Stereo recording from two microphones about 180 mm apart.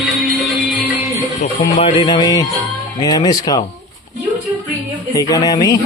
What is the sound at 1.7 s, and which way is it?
Speech, 30° left (ahead or behind).